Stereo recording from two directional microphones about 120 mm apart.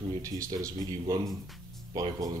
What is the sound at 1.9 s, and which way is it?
Speech, 30° right (ahead or behind).